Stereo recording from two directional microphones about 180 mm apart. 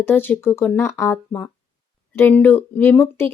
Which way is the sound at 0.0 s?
10° left (ahead or behind).